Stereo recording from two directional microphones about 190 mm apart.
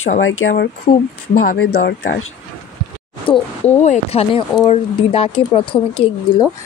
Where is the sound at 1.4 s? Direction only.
55° left (ahead or behind).